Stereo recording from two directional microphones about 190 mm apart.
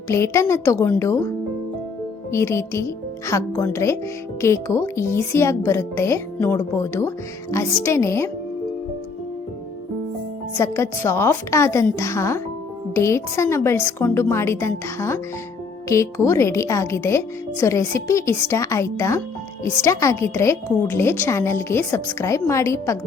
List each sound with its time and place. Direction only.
0.1 s a woman's voice: 15° left (ahead or behind)
2.3 s a woman's voice: 15° left (ahead or behind)
10.6 s a woman's voice: 15° left (ahead or behind)